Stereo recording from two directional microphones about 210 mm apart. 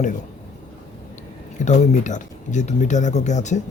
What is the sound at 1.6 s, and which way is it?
Speech, 35° left (ahead or behind).